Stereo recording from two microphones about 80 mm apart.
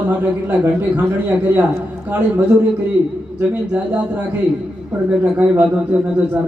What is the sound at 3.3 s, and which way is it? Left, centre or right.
A man's voice, right.